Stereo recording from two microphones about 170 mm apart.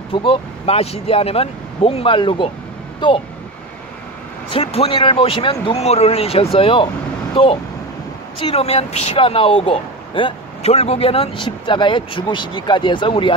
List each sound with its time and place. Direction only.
0.1 s speech: 30° left (ahead or behind)
4.6 s speech: 35° left (ahead or behind)
8.4 s speech: 35° left (ahead or behind)